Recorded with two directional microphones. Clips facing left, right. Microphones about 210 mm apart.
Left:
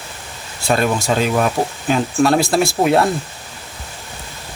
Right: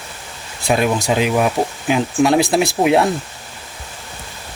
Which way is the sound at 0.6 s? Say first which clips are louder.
Right 1 dB; 10° right (ahead or behind).